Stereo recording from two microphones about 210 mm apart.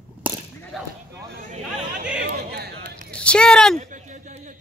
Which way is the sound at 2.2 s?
50° right (ahead or behind).